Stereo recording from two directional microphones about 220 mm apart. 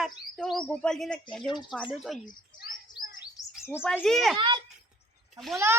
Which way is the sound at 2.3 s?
40° left (ahead or behind).